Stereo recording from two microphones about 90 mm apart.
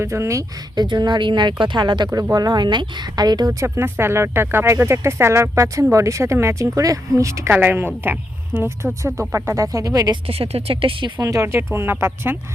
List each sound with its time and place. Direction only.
0.0 s speech: 30° right (ahead or behind)
0.8 s speech: 50° right (ahead or behind)
3.5 s speech: 30° right (ahead or behind)
7.5 s speech: 25° right (ahead or behind); by 10.2 s 45° right (ahead or behind)
10.2 s speech: 90° right
11.2 s speech: 40° right (ahead or behind)
11.4 s speech: 25° right (ahead or behind)